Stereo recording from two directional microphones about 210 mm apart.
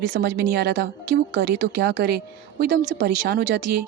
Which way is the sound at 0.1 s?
50° right (ahead or behind).